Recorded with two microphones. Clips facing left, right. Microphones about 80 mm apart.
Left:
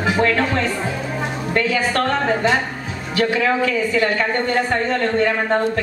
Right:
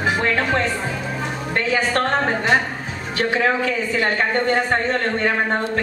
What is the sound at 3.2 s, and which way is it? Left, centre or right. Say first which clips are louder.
Speech: left 1 dB; right.